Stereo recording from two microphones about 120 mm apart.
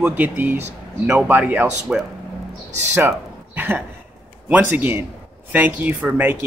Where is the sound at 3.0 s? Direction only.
15° right (ahead or behind).